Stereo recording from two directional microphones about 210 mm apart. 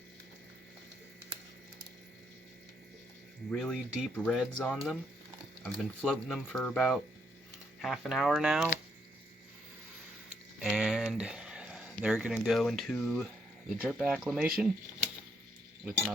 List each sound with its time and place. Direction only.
3.5 s speech: 5° left (ahead or behind)
10.6 s a sound: centre (ahead or behind)
12.5 s speech: centre (ahead or behind)